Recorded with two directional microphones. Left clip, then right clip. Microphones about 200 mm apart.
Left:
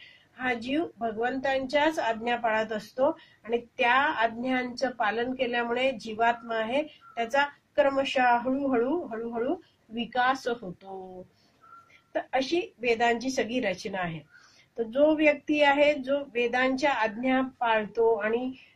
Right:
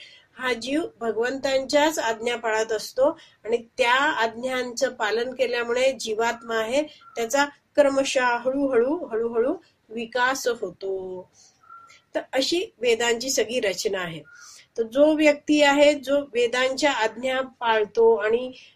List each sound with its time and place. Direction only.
0.4 s a woman's voice: 45° right (ahead or behind)
12.1 s a woman's voice: 45° right (ahead or behind)